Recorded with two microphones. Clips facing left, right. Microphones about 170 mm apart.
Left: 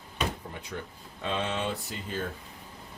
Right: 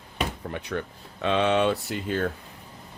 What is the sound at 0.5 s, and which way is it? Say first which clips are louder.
Speech: right 8 dB; 75° right (ahead or behind).